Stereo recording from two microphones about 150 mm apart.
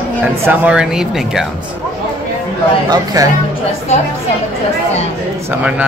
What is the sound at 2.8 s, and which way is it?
Speech, 25° right (ahead or behind).